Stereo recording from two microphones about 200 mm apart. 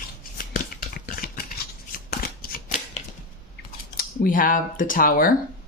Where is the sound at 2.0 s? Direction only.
45° left (ahead or behind).